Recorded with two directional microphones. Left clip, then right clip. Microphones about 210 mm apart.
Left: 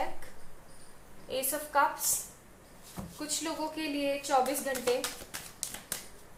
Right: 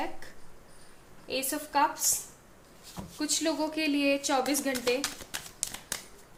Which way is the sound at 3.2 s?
50° right (ahead or behind).